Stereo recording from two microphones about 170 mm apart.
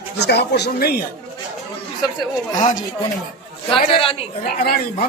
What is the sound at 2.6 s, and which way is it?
Speech, 50° left (ahead or behind).